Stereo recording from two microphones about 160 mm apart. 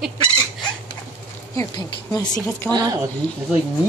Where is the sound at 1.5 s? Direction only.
20° left (ahead or behind).